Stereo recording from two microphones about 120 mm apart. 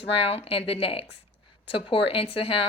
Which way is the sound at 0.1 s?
55° left (ahead or behind).